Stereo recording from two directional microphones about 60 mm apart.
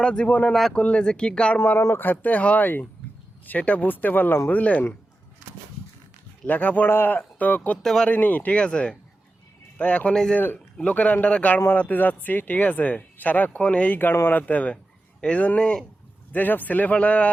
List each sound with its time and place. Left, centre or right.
0.0 s speech: centre
1.5 s speech: left
6.4 s speech: left
7.8 s speech: centre
8.1 s speech: left
10.3 s speech: left
14.0 s speech: left; by 15.8 s centre
16.3 s speech: left